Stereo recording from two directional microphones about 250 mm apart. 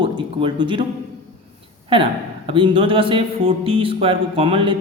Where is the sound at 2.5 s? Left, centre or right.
Right.